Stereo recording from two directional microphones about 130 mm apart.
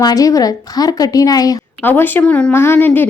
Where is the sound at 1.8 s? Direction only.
15° left (ahead or behind).